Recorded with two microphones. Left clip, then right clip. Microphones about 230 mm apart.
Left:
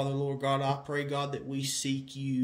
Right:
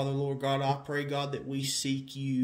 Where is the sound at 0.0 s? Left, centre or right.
Centre.